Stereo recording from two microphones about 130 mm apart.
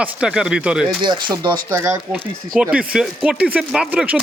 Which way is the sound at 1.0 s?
35° right (ahead or behind).